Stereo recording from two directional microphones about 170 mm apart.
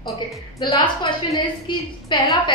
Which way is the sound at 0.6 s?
25° left (ahead or behind).